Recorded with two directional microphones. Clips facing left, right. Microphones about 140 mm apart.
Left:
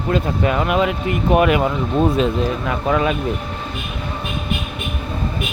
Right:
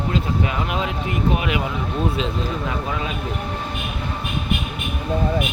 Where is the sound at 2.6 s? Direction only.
65° left (ahead or behind).